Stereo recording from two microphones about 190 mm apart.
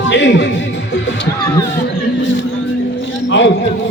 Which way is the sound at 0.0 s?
70° left (ahead or behind).